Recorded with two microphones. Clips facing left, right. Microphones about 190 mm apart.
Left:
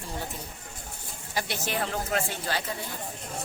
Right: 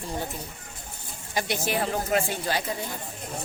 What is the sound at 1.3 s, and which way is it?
Speech, 15° right (ahead or behind).